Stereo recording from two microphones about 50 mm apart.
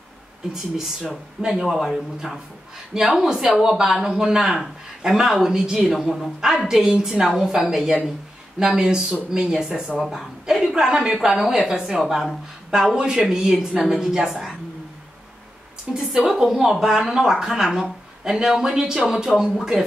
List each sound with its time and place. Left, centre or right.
1.4 s a man's voice: centre
6.8 s a man's voice: centre
15.9 s a man's voice: centre